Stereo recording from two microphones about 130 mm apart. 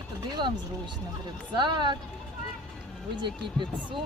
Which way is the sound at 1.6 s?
35° right (ahead or behind).